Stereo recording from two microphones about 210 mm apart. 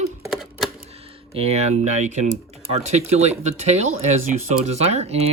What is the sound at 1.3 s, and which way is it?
Speech, 30° right (ahead or behind).